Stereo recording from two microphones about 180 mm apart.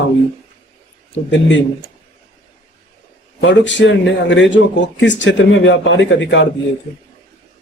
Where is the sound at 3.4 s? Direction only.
90° left.